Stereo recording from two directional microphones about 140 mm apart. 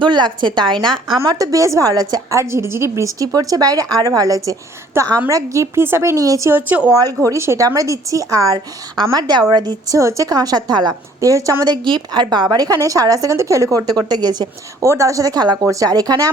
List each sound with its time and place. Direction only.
0.0 s a woman's voice: 30° right (ahead or behind)
1.2 s a woman's voice: 25° right (ahead or behind)
6.9 s a woman's voice: 25° right (ahead or behind)